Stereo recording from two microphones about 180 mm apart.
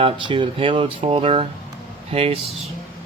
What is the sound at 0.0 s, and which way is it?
Speech, 25° right (ahead or behind).